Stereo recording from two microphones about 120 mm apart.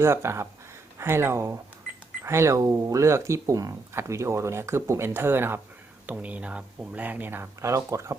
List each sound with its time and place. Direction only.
0.0 s speech: 20° right (ahead or behind)